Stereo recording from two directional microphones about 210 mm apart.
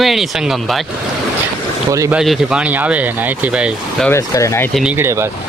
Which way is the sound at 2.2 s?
Centre (ahead or behind).